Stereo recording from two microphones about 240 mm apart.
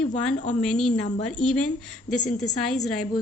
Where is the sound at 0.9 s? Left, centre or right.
Left.